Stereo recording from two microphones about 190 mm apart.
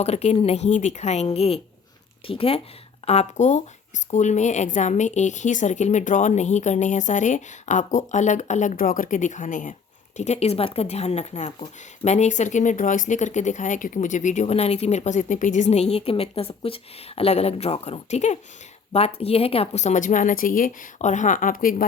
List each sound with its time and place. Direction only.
0.0 s a woman's voice: 35° left (ahead or behind)